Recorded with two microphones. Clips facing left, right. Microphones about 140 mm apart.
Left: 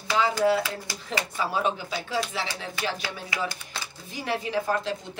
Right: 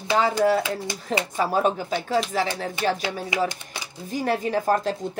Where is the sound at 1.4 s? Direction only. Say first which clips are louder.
Right 5 dB; 45° right (ahead or behind).